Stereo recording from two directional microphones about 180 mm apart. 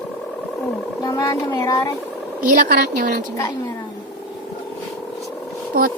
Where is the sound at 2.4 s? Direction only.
50° right (ahead or behind).